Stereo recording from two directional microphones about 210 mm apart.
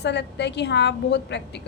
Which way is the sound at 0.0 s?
55° left (ahead or behind).